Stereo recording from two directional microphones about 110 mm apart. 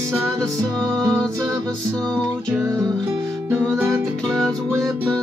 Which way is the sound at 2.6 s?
30° right (ahead or behind).